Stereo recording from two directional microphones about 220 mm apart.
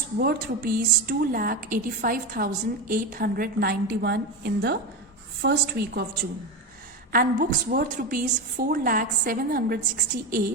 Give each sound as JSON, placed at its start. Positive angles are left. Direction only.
{"t": 0.2, "sound": "a woman's voice", "side_deg": -45}
{"t": 7.1, "sound": "a woman's voice", "side_deg": -40}